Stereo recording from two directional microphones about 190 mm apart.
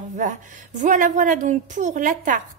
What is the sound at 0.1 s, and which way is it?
A woman's voice, 40° right (ahead or behind).